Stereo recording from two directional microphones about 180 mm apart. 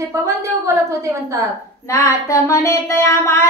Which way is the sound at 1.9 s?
15° left (ahead or behind).